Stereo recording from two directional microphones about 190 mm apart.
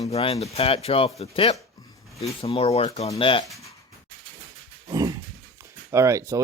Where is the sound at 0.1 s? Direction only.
35° left (ahead or behind).